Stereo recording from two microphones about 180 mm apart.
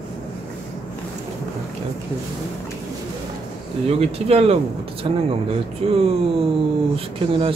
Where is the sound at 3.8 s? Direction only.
35° right (ahead or behind).